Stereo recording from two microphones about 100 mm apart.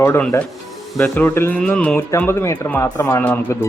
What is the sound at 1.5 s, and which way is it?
Music, 15° left (ahead or behind).